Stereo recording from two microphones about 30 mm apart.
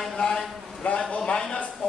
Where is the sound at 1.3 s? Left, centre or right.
Left.